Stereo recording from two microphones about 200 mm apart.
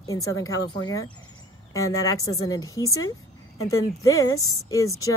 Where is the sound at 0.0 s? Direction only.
15° left (ahead or behind).